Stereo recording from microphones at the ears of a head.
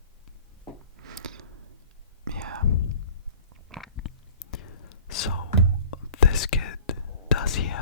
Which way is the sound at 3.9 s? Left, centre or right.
Left.